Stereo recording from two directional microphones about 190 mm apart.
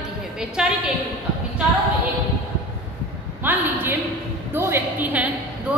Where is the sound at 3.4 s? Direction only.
10° right (ahead or behind).